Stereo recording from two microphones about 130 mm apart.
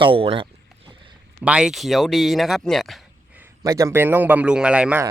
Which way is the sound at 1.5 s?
5° right (ahead or behind).